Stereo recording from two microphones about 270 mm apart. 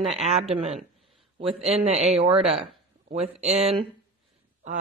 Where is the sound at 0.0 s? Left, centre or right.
Right.